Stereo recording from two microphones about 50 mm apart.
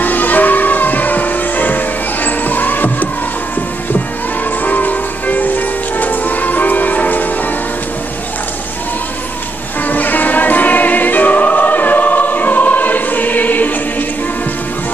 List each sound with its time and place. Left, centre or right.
0.0 s music: left
4.6 s music: left
9.8 s choir: left